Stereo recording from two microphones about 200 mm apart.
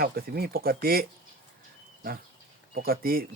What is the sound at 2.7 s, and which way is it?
Speech, 45° right (ahead or behind).